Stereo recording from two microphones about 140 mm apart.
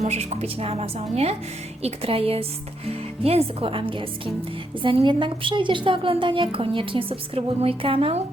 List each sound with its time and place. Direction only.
0.0 s a woman's voice: 50° right (ahead or behind)